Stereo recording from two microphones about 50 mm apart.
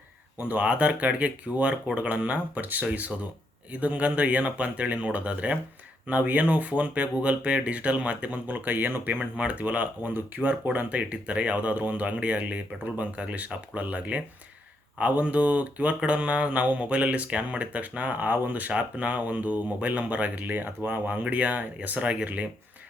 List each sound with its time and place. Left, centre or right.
0.3 s speech: right